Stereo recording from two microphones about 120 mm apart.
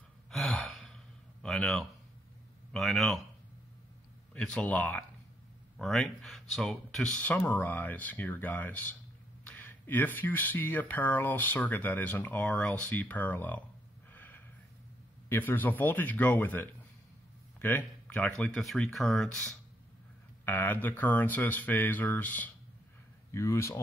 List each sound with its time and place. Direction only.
0.3 s sigh: 5° left (ahead or behind)
2.7 s speech: centre (ahead or behind)
4.3 s speech: 10° left (ahead or behind)
7.2 s speech: 15° left (ahead or behind)
14.1 s snort: 15° left (ahead or behind)
15.2 s speech: 15° left (ahead or behind)
20.4 s speech: 15° left (ahead or behind)
23.3 s speech: 25° left (ahead or behind)